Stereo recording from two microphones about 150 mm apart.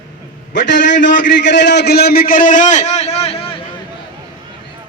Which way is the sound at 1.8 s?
90° left.